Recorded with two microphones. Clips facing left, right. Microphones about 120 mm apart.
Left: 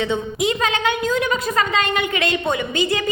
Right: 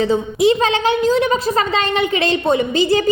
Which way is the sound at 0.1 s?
30° right (ahead or behind).